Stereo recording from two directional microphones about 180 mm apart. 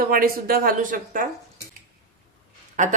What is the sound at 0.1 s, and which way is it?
Speech, 55° right (ahead or behind).